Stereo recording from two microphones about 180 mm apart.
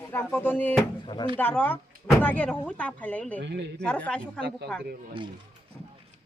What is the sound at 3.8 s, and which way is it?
A woman's voice, 5° left (ahead or behind).